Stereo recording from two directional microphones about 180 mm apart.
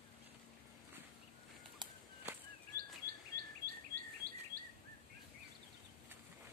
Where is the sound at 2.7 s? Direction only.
55° right (ahead or behind).